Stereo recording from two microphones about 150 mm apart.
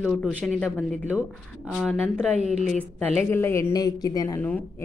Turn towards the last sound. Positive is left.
turn(degrees=10)  # may be behind; listen again after turning